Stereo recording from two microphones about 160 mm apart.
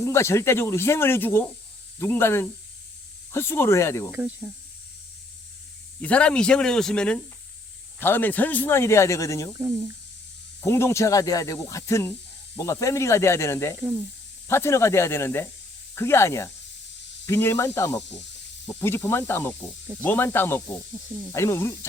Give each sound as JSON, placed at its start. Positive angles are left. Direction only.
{"t": 0.0, "sound": "speech", "side_deg": 15}
{"t": 4.1, "sound": "speech", "side_deg": -10}
{"t": 6.0, "sound": "speech", "side_deg": 10}
{"t": 9.6, "sound": "speech", "side_deg": -20}
{"t": 10.6, "sound": "speech", "side_deg": 15}
{"t": 13.7, "sound": "speech", "side_deg": -15}
{"t": 14.4, "sound": "speech", "side_deg": 15}